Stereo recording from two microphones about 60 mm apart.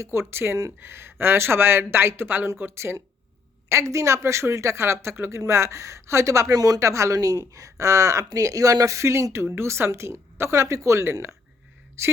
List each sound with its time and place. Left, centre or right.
0.0 s speech: right